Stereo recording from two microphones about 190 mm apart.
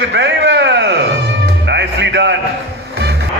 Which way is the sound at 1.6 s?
65° right (ahead or behind).